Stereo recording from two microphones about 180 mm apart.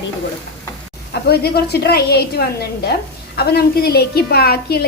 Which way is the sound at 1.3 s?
60° left (ahead or behind).